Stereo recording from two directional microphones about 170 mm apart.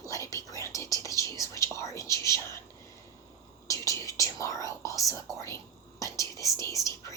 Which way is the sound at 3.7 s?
20° left (ahead or behind).